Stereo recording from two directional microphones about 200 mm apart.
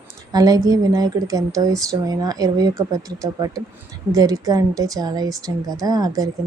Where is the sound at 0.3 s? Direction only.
20° right (ahead or behind).